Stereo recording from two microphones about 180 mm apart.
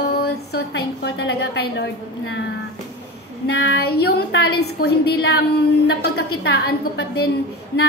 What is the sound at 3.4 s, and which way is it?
A woman's voice, 65° left (ahead or behind).